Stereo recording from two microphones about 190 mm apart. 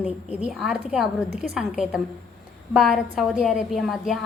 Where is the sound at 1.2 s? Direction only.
55° right (ahead or behind).